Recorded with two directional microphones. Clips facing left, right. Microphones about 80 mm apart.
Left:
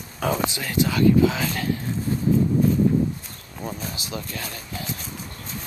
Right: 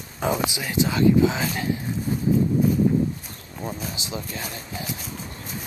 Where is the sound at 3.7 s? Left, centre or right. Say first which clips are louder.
Even; centre.